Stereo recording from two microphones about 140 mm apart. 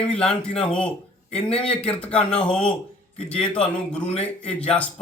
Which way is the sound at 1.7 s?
45° left (ahead or behind).